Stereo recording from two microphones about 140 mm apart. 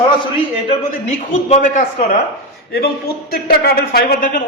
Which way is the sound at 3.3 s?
90° left.